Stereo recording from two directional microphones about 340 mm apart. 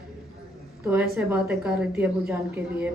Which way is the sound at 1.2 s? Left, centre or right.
Centre.